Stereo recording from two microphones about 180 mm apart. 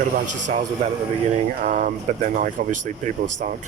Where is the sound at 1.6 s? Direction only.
45° right (ahead or behind).